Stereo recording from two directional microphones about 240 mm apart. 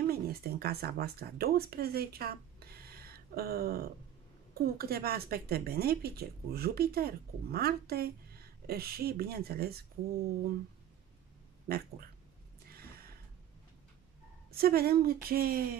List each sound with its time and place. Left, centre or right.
0.0 s a woman's voice: right
11.6 s a woman's voice: right
12.6 s a sound: right
14.5 s a woman's voice: right